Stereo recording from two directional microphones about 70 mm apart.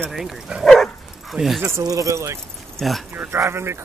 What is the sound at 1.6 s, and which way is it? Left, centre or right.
Speech, right.